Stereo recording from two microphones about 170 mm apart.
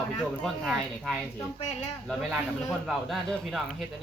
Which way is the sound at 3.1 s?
Centre (ahead or behind).